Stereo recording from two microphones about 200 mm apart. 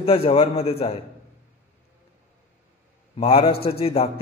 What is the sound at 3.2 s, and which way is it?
Speech, 25° left (ahead or behind).